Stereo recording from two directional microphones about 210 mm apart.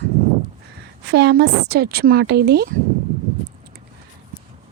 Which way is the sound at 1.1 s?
55° right (ahead or behind).